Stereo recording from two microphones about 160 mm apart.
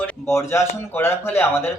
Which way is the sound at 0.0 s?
15° left (ahead or behind).